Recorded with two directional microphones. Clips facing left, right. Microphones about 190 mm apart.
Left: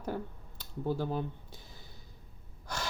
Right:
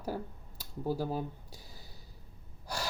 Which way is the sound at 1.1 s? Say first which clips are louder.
Left 1 dB; 35° right (ahead or behind).